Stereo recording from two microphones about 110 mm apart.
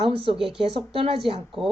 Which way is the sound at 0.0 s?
55° right (ahead or behind).